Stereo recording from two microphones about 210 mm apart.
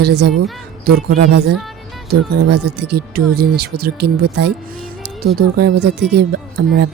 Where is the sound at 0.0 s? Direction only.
50° right (ahead or behind).